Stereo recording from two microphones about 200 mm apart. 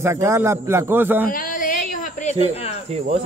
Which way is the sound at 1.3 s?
45° left (ahead or behind).